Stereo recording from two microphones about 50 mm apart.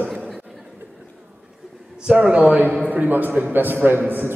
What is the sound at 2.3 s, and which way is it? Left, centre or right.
A man's voice, right.